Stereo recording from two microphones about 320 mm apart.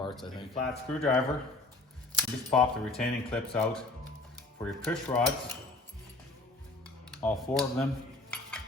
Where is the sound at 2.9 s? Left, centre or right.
Centre.